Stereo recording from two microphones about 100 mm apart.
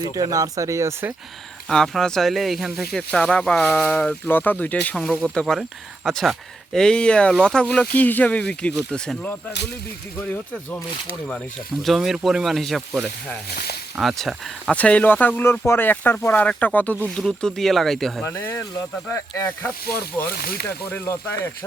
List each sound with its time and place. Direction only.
0.0 s speech: 35° right (ahead or behind)
1.6 s speech: 5° left (ahead or behind)
11.8 s speech: centre (ahead or behind)
14.7 s speech: 15° left (ahead or behind)
17.2 s speech: 5° left (ahead or behind)
18.2 s speech: 20° left (ahead or behind)
20.7 s speech: 20° left (ahead or behind)